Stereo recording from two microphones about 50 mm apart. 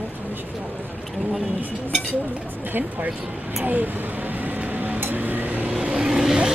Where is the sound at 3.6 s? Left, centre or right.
Right.